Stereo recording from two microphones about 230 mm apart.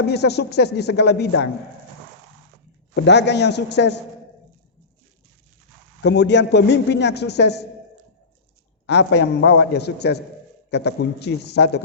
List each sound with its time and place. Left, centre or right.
0.1 s a man's voice: left
2.9 s a man's voice: left
6.0 s a man's voice: left
8.9 s a man's voice: left